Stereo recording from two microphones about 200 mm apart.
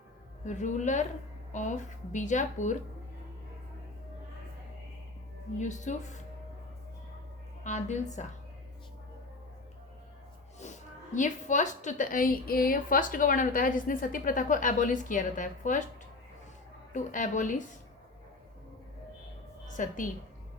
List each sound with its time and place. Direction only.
0.4 s speech: 35° left (ahead or behind)
5.5 s speech: 35° left (ahead or behind)
7.6 s speech: 35° left (ahead or behind)
11.1 s a woman's voice: 40° left (ahead or behind)
16.9 s speech: 40° left (ahead or behind)
19.7 s speech: 40° left (ahead or behind)